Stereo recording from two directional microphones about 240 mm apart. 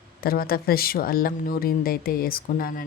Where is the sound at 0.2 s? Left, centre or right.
Left.